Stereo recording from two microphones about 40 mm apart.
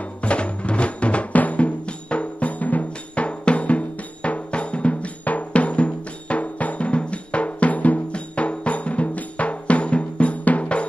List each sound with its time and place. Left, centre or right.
0.2 s drum: left